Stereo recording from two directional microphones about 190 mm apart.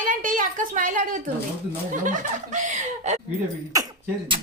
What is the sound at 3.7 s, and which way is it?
Speech, 20° right (ahead or behind).